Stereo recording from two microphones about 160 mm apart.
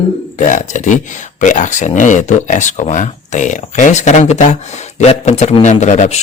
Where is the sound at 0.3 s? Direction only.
50° left (ahead or behind).